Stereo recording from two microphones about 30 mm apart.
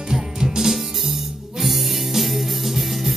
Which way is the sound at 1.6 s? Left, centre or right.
Centre.